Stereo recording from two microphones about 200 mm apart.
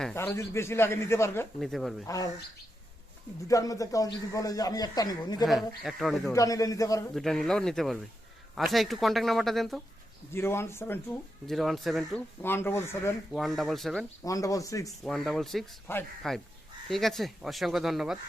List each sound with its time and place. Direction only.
0.0 s a man's voice: 10° left (ahead or behind)
1.5 s speech: centre (ahead or behind)
2.0 s a man's voice: 15° left (ahead or behind)
3.5 s a man's voice: 15° left (ahead or behind)
5.5 s speech: centre (ahead or behind)
6.3 s a man's voice: 15° left (ahead or behind)
7.1 s speech: centre (ahead or behind)
10.3 s a man's voice: 10° left (ahead or behind)
11.5 s speech: centre (ahead or behind)
12.4 s a man's voice: 10° left (ahead or behind)
13.3 s speech: centre (ahead or behind)
14.3 s a man's voice: 15° left (ahead or behind)
15.0 s speech: centre (ahead or behind)